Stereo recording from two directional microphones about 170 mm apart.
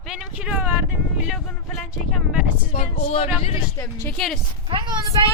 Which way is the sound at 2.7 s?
35° left (ahead or behind).